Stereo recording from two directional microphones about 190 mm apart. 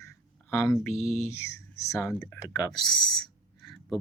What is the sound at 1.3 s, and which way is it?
Speech, 15° left (ahead or behind).